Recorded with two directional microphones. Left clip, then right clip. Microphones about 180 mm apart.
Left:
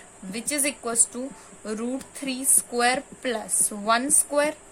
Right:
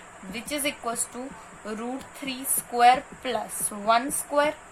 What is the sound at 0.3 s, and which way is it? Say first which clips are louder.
Speech: left 1 dB; 55° left (ahead or behind).